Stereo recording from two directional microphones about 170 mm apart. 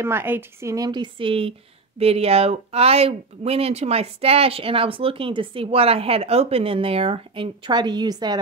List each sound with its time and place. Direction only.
0.0 s a woman's voice: 15° right (ahead or behind)